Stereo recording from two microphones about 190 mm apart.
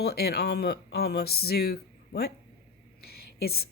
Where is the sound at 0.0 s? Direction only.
55° left (ahead or behind).